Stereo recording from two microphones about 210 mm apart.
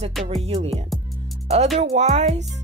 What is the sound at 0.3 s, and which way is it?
Speech, 30° right (ahead or behind).